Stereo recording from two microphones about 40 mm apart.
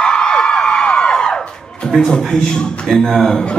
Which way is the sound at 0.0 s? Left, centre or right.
Centre.